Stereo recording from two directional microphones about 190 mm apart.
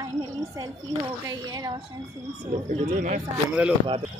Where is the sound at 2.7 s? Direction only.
40° right (ahead or behind).